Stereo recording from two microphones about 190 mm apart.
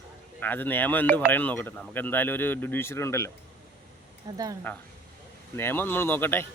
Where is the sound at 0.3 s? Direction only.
10° left (ahead or behind).